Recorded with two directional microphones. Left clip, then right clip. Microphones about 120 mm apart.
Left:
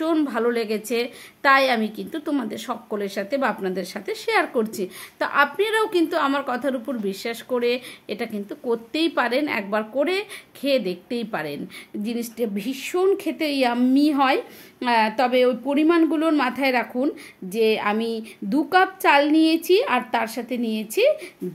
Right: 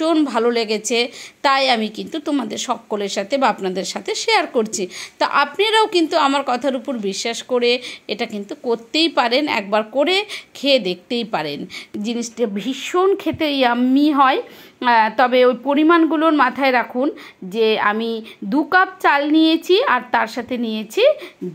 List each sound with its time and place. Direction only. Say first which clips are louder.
0.0 s a woman's voice: right 5 dB; 15° right (ahead or behind)